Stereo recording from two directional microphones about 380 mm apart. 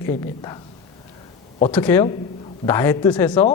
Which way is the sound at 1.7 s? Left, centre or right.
Centre.